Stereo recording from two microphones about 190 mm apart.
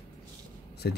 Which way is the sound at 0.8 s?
60° left (ahead or behind).